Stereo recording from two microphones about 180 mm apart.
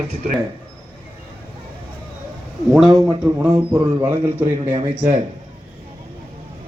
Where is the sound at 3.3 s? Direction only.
10° right (ahead or behind).